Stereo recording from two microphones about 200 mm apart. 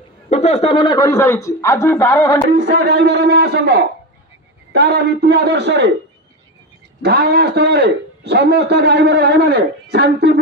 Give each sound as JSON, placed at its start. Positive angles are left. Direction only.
{"t": 0.3, "sound": "speech", "side_deg": 30}
{"t": 2.6, "sound": "a man's voice", "side_deg": -55}
{"t": 7.0, "sound": "a man's voice", "side_deg": -55}